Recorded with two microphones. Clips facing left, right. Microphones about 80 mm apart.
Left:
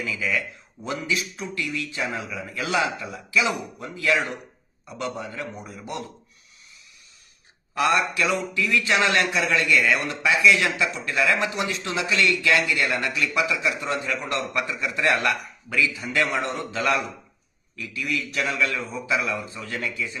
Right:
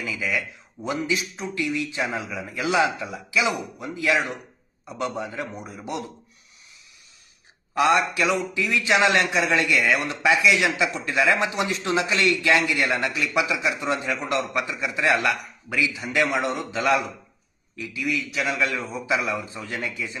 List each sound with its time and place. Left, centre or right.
0.0 s a man's voice: centre
7.8 s speech: right
14.8 s a man's voice: centre
15.7 s a man's voice: centre
18.0 s a man's voice: centre
18.6 s speech: right